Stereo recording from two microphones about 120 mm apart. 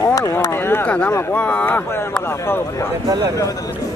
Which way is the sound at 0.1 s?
25° left (ahead or behind).